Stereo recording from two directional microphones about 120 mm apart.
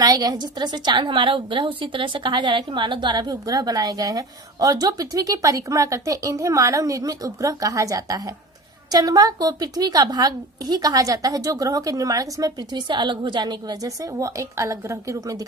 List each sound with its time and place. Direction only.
0.0 s a woman's voice: 30° right (ahead or behind)